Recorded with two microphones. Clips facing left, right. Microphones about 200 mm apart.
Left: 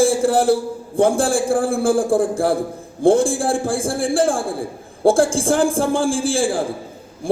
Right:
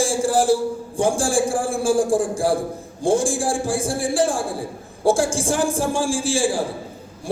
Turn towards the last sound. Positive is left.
turn(degrees=55)  # may be behind; listen again after turning